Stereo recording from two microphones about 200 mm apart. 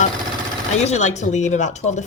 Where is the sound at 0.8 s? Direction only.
35° left (ahead or behind).